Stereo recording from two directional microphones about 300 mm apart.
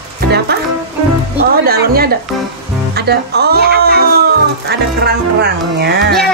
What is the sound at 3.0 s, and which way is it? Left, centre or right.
Music, right.